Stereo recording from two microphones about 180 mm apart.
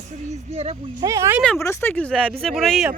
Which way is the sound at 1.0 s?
15° right (ahead or behind).